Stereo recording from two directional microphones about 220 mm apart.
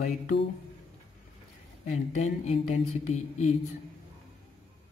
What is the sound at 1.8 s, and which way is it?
Speech, 30° left (ahead or behind).